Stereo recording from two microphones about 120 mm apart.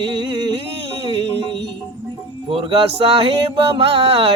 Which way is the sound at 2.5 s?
45° right (ahead or behind).